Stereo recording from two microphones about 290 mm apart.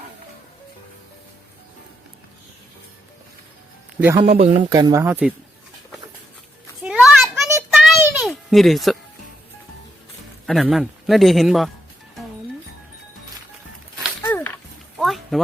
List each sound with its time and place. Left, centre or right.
4.0 s speech: centre
6.8 s child singing: centre
10.4 s a man's voice: centre
14.0 s a sound: centre